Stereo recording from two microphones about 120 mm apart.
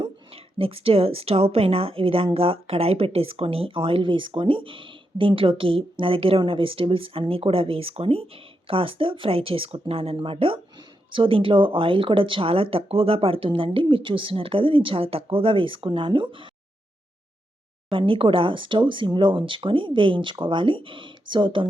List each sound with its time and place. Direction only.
0.6 s a woman's voice: 50° right (ahead or behind)
17.8 s a woman's voice: 45° right (ahead or behind)